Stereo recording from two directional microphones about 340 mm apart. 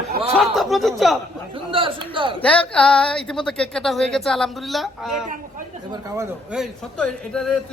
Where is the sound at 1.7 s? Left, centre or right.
Centre.